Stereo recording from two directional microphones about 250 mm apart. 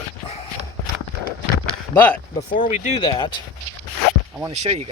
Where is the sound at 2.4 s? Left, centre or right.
Left.